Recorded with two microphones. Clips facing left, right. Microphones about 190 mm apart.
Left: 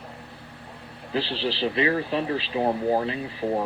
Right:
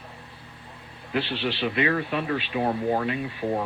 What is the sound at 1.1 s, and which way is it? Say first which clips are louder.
Speech: even; 35° left (ahead or behind).